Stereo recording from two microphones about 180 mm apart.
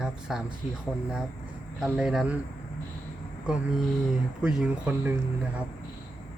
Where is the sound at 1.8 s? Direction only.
5° right (ahead or behind).